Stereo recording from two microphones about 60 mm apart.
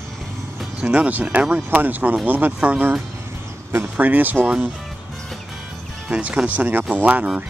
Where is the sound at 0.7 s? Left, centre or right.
Right.